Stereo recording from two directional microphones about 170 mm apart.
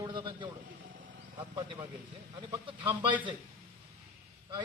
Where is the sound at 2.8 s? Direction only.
10° right (ahead or behind).